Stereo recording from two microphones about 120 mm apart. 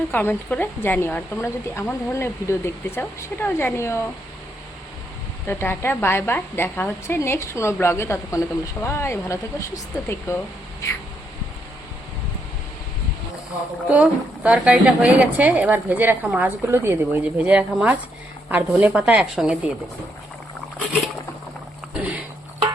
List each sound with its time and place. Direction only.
0.1 s a woman's voice: 15° left (ahead or behind)
5.5 s a woman's voice: 20° left (ahead or behind)
13.9 s a woman's voice: 10° right (ahead or behind)
21.9 s a sound: 10° right (ahead or behind)